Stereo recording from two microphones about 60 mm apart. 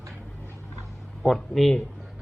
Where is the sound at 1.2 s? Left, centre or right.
Centre.